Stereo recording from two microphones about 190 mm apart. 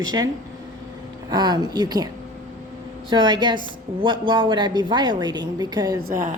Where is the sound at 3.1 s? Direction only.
25° right (ahead or behind).